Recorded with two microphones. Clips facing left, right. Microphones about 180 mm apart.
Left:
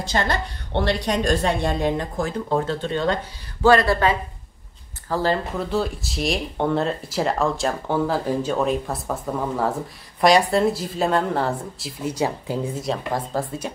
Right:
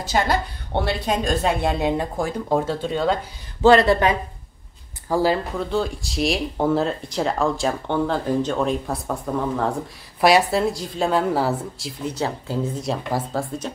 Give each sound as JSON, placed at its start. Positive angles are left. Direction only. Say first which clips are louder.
{"t": 0.1, "sound": "a woman's voice", "louder": "right 3 dB", "side_deg": -5}
{"t": 3.6, "sound": "a woman's voice", "louder": "right 2 dB", "side_deg": -20}
{"t": 5.6, "sound": "speech", "louder": "even", "side_deg": 0}
{"t": 12.0, "sound": "speech", "louder": "left 2 dB", "side_deg": 10}
{"t": 12.8, "sound": "speech", "louder": "even", "side_deg": 0}